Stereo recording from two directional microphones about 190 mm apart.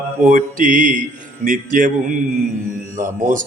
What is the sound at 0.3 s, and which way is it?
Speech, 45° right (ahead or behind).